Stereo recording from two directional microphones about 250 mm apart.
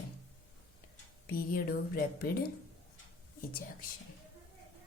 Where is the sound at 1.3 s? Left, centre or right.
Left.